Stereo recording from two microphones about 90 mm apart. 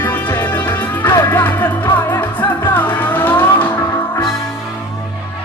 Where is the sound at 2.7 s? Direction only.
20° left (ahead or behind).